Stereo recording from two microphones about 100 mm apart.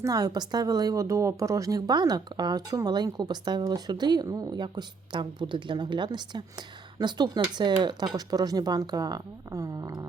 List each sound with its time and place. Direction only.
0.0 s speech: 40° right (ahead or behind)